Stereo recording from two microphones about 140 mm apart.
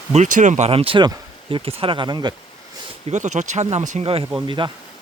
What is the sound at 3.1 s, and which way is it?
Speech, 55° right (ahead or behind).